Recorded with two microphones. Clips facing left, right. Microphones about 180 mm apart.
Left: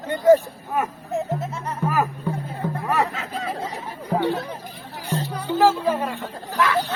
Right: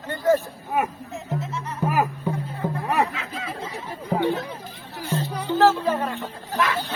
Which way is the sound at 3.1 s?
40° left (ahead or behind).